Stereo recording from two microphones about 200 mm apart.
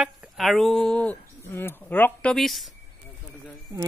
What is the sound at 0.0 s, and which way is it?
Speech, centre (ahead or behind).